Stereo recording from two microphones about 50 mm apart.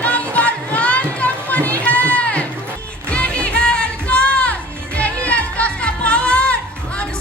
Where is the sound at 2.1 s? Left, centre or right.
Left.